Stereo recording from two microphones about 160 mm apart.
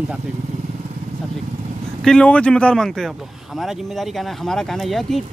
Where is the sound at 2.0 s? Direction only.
5° left (ahead or behind).